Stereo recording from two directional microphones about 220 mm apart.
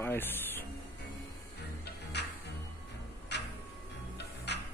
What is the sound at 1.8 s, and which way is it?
Music, 50° left (ahead or behind).